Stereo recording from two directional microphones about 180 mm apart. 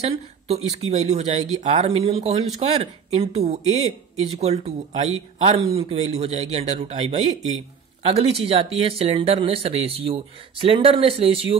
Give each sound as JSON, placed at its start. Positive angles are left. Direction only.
{"t": 0.0, "sound": "speech", "side_deg": -35}